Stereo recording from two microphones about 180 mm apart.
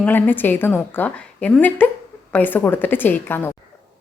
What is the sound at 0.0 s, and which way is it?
A woman's voice, 10° left (ahead or behind).